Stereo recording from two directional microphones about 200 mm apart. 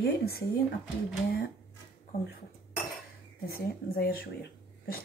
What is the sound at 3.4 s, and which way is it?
Speech, 50° left (ahead or behind).